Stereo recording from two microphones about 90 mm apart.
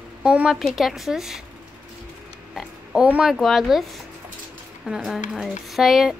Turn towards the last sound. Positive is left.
turn(degrees=-5)  # may be behind; listen again after turning